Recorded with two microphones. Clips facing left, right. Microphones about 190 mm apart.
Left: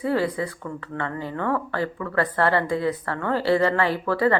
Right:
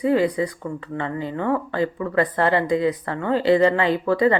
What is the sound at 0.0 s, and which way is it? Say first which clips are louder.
Speech: right 4 dB; 15° right (ahead or behind).